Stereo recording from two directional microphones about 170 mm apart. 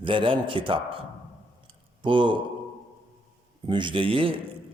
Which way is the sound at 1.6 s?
30° right (ahead or behind).